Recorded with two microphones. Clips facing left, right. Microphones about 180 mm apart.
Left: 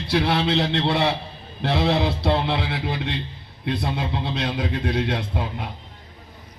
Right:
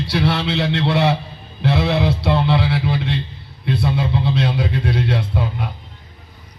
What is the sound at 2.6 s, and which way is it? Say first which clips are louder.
Speech: right 6 dB; 50° left (ahead or behind).